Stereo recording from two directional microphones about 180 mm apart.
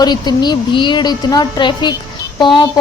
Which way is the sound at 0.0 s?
25° left (ahead or behind).